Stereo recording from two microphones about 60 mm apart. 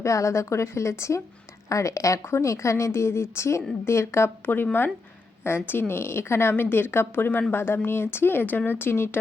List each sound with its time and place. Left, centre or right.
0.0 s speech: left
4.4 s speech: left